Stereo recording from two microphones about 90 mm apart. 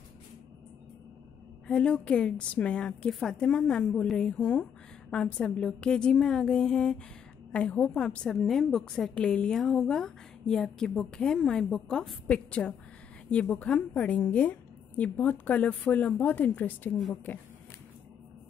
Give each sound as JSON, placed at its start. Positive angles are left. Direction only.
{"t": 1.7, "sound": "a woman's voice", "side_deg": 10}